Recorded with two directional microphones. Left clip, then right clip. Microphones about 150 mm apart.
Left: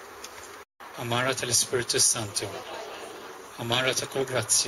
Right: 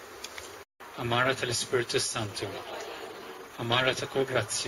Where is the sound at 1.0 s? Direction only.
20° left (ahead or behind).